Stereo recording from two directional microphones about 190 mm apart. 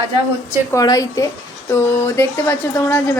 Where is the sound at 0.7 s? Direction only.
20° left (ahead or behind).